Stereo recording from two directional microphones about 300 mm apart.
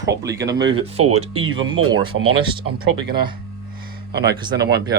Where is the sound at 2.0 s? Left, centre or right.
Right.